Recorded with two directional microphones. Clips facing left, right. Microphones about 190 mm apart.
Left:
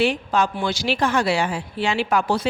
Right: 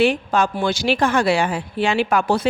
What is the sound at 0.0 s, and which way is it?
Speech, 50° right (ahead or behind).